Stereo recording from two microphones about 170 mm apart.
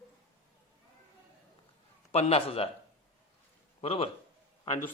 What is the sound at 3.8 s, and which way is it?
Speech, 35° left (ahead or behind).